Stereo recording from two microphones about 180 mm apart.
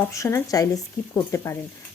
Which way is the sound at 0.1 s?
15° left (ahead or behind).